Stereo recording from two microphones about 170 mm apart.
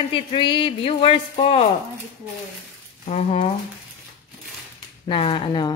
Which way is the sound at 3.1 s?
40° left (ahead or behind).